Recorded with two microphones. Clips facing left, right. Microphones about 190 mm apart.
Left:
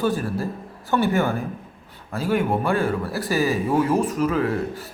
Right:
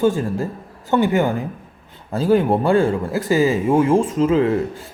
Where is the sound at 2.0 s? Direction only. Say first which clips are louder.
Right 6 dB; 30° right (ahead or behind).